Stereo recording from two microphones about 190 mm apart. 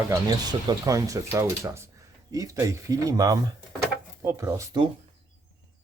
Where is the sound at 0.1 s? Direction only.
20° right (ahead or behind).